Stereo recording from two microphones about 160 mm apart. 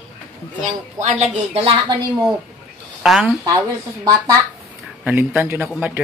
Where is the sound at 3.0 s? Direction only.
5° right (ahead or behind).